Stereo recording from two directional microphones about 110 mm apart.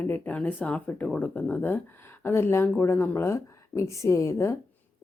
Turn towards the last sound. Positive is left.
turn(degrees=25)  # may be behind; listen again after turning